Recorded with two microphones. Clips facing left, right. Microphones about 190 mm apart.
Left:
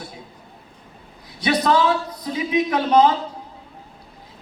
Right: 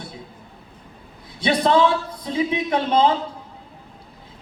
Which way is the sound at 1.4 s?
30° right (ahead or behind).